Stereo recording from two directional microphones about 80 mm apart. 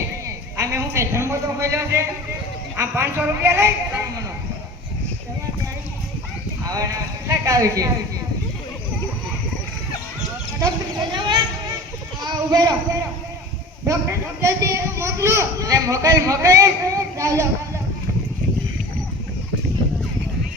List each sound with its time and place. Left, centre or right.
0.3 s a sound: right
1.3 s music: right
2.7 s a woman's voice: right
6.7 s speech: right
11.1 s speech: right
12.2 s speech: right
13.8 s speech: right